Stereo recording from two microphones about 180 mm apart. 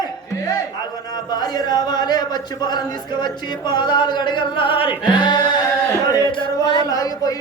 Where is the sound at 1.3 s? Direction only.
20° left (ahead or behind).